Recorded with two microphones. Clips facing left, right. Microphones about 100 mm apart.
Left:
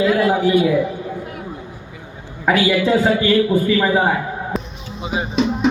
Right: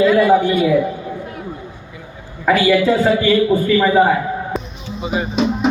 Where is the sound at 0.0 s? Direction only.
20° left (ahead or behind).